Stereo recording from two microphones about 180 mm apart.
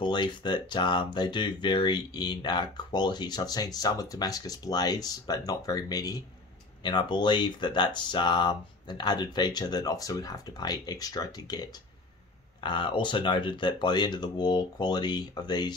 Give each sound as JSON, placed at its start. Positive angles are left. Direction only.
{"t": 0.0, "sound": "speech", "side_deg": 25}